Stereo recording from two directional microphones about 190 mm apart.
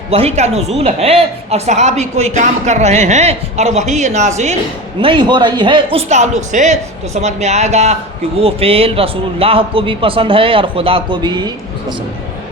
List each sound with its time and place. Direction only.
0.1 s speech: 35° right (ahead or behind)
4.9 s a man's voice: 25° right (ahead or behind)